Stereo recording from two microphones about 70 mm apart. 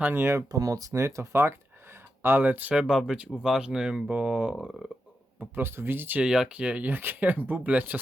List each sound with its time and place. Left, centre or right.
0.0 s speech: right
0.4 s speech: right
2.8 s speech: centre
5.4 s speech: right
6.2 s speech: centre